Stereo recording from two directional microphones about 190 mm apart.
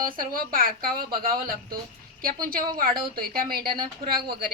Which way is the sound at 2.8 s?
50° right (ahead or behind).